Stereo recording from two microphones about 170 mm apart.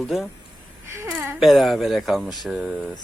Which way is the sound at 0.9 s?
15° right (ahead or behind).